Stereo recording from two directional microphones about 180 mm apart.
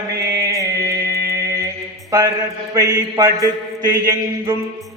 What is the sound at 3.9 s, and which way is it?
Music, 15° right (ahead or behind).